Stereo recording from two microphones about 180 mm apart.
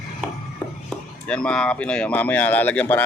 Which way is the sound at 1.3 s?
5° left (ahead or behind).